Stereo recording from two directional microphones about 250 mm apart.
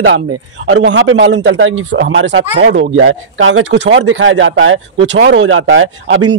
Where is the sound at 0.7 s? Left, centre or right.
Right.